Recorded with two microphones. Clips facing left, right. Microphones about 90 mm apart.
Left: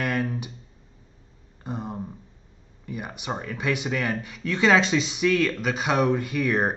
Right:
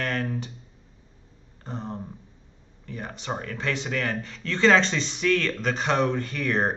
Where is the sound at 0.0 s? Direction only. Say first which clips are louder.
Left 2 dB; 15° left (ahead or behind).